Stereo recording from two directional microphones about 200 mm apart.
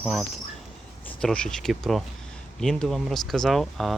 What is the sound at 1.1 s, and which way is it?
Speech, 5° left (ahead or behind).